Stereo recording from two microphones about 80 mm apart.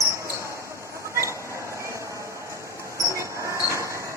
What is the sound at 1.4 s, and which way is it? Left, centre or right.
Train, right.